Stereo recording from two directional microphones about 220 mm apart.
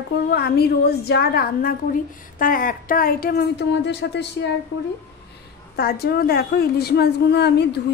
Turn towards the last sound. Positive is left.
turn(degrees=50)  # may be behind; listen again after turning